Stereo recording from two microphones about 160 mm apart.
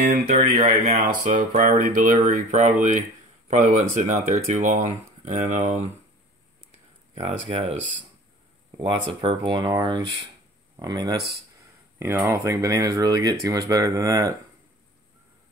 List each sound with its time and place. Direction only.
0.3 s speech: 40° right (ahead or behind)
7.2 s speech: 40° right (ahead or behind)
8.7 s speech: 30° right (ahead or behind)
12.0 s speech: 15° right (ahead or behind)